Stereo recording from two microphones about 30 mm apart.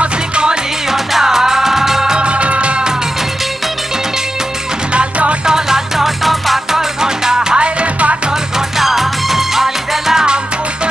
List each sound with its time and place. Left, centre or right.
1.2 s music: centre
2.1 s music: right
5.4 s music: right
5.9 s music: centre
6.8 s music: centre
7.5 s music: right
8.5 s music: centre